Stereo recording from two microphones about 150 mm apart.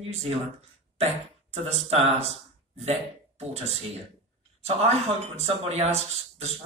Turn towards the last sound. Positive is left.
turn(degrees=-45)  # may be behind; listen again after turning